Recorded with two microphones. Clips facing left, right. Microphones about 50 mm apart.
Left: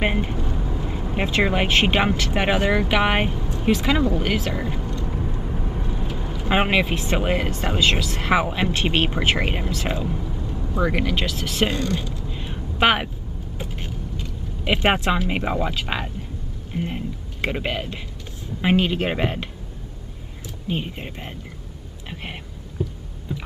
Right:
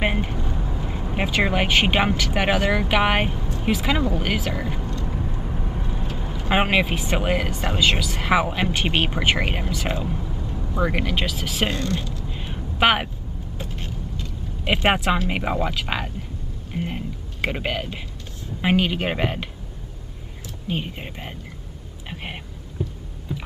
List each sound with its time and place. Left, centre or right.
0.0 s speech: centre
5.0 s vehicle: centre
6.1 s speech: centre
11.7 s speech: centre
12.3 s a sound: centre
13.6 s vehicle: centre
14.6 s speech: centre
16.7 s a sound: centre
18.6 s speech: centre
20.6 s speech: centre
22.1 s a sound: centre